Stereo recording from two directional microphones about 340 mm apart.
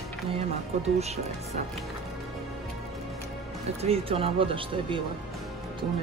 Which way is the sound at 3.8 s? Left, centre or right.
Centre.